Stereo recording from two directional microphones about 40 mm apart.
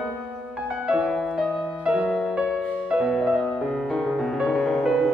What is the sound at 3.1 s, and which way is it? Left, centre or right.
Music, centre.